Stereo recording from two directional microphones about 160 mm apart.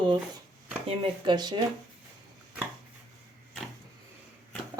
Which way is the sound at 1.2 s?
25° right (ahead or behind).